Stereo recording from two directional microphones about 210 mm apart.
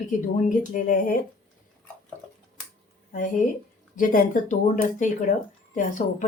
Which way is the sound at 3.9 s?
40° left (ahead or behind).